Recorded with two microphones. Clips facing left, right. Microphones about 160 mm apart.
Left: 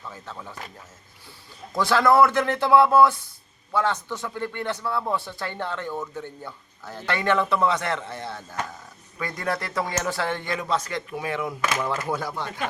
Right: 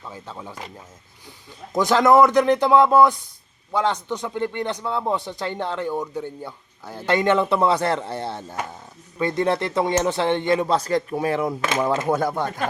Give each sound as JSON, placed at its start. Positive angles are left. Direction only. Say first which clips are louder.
{"t": 0.1, "sound": "speech", "louder": "right 5 dB", "side_deg": -15}
{"t": 1.7, "sound": "speech", "louder": "right 4 dB", "side_deg": -20}
{"t": 12.0, "sound": "speech", "louder": "right 7 dB", "side_deg": -50}